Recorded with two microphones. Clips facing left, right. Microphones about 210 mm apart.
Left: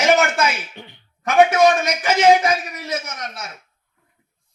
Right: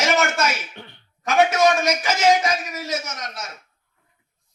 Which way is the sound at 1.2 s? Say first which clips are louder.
Left 3 dB; 55° left (ahead or behind).